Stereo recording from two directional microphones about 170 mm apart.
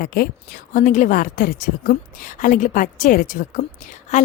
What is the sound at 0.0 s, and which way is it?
Speech, 60° left (ahead or behind).